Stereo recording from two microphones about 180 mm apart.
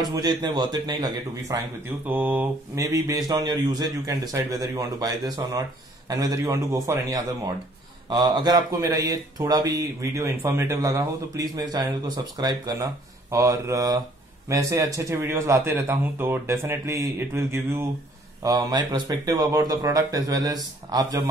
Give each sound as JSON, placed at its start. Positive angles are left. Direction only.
{"t": 0.0, "sound": "speech", "side_deg": -20}
{"t": 2.0, "sound": "speech", "side_deg": -10}